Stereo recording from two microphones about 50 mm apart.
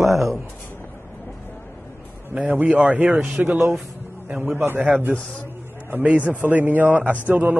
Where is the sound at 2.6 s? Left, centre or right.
Right.